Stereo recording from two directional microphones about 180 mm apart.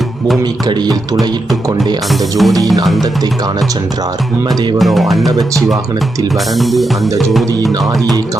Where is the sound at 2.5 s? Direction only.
20° right (ahead or behind).